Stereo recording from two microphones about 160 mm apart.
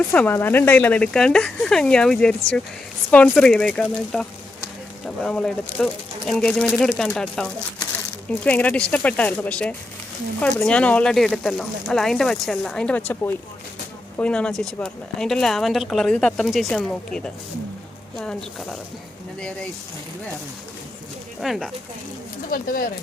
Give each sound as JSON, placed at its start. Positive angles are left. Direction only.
{"t": 0.1, "sound": "speech", "side_deg": 10}
{"t": 21.4, "sound": "speech", "side_deg": 0}
{"t": 22.4, "sound": "speech", "side_deg": 60}